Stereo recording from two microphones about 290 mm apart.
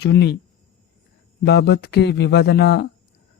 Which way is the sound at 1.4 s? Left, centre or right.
Left.